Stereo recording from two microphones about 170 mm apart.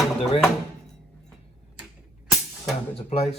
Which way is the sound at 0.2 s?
35° left (ahead or behind).